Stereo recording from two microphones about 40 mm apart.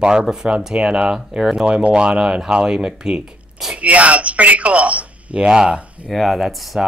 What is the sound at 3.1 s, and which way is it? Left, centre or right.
Zipper, right.